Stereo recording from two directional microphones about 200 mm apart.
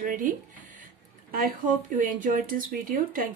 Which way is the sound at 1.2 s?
45° right (ahead or behind).